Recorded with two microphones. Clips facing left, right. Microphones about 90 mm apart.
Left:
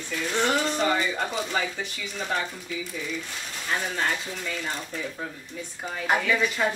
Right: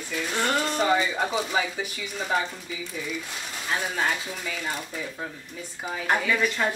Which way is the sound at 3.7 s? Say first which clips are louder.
Right 1 dB; 5° right (ahead or behind).